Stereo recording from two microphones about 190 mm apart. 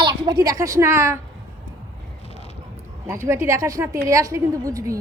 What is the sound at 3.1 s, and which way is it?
A woman's voice, 15° right (ahead or behind).